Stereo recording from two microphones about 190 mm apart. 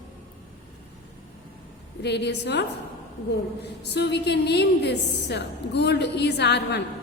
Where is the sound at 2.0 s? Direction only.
60° left (ahead or behind).